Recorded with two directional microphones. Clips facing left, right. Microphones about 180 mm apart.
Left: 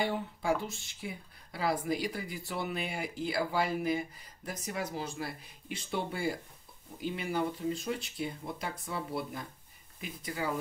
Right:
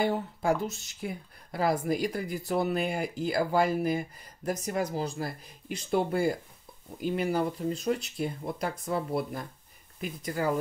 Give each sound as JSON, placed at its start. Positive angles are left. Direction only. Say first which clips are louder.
{"t": 0.0, "sound": "speech", "louder": "right 5 dB", "side_deg": -45}